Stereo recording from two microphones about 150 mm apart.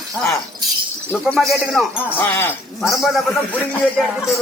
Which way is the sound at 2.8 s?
Centre (ahead or behind).